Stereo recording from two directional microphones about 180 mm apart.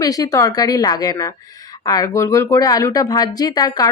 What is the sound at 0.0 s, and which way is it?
Speech, 20° left (ahead or behind).